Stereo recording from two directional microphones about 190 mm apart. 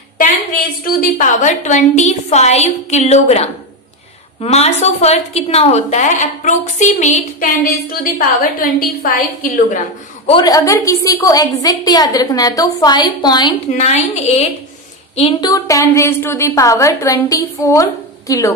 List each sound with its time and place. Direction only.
0.8 s a woman's voice: 45° left (ahead or behind)
10.5 s a woman's voice: 15° left (ahead or behind)
13.7 s a woman's voice: 35° left (ahead or behind)
15.5 s a woman's voice: 15° left (ahead or behind)